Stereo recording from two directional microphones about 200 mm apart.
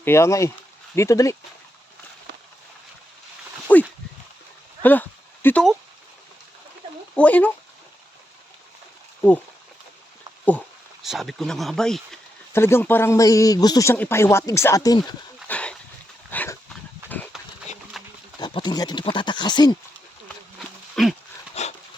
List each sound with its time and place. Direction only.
0.0 s speech: 15° left (ahead or behind)
3.7 s a sound: 10° left (ahead or behind)
7.2 s speech: 5° left (ahead or behind)
11.0 s speech: centre (ahead or behind); by 15.1 s 20° left (ahead or behind)
15.4 s dog: 5° left (ahead or behind)
17.3 s horse: centre (ahead or behind)
18.0 s pig: centre (ahead or behind)
18.3 s speech: 20° left (ahead or behind)
20.9 s dog: centre (ahead or behind)
21.6 s dog: 30° left (ahead or behind)